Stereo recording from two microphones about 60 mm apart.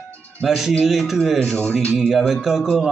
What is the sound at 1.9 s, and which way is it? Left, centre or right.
Speech, centre.